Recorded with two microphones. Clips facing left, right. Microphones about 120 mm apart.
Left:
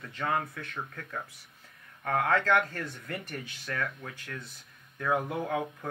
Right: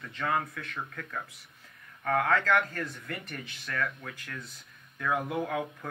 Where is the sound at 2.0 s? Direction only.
30° left (ahead or behind).